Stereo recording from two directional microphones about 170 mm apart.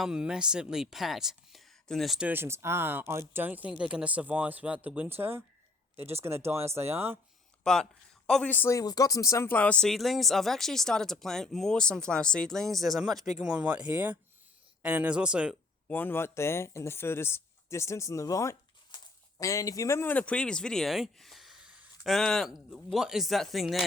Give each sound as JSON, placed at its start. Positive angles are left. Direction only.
{"t": 0.0, "sound": "speech", "side_deg": -5}
{"t": 7.6, "sound": "speech", "side_deg": 5}
{"t": 15.9, "sound": "speech", "side_deg": 10}